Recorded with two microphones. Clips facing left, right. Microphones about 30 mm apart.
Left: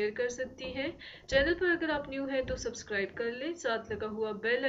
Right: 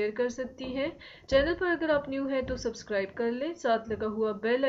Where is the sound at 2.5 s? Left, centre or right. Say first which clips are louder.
Right 3 dB; right.